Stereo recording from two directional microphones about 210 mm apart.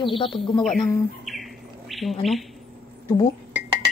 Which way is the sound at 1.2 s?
Centre (ahead or behind).